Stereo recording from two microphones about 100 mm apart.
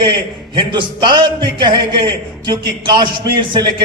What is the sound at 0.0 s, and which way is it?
A man's voice, 50° right (ahead or behind).